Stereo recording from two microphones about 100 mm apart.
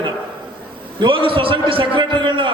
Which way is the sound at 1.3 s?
60° right (ahead or behind).